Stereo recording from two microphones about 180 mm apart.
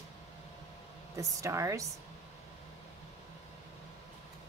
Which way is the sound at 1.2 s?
15° right (ahead or behind).